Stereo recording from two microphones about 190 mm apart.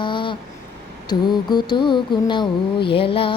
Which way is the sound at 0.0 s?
25° left (ahead or behind).